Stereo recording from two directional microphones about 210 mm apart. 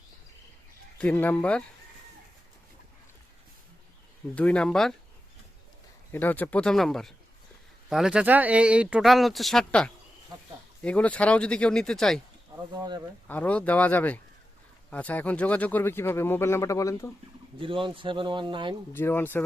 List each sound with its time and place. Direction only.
0.9 s speech: 5° left (ahead or behind)
4.4 s speech: 5° left (ahead or behind)
6.1 s speech: 10° left (ahead or behind)
12.7 s speech: 20° right (ahead or behind)
13.2 s speech: 10° left (ahead or behind)
17.6 s speech: 25° right (ahead or behind)
18.9 s speech: 10° left (ahead or behind)